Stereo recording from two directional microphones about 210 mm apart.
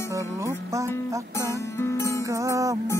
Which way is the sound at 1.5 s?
15° left (ahead or behind).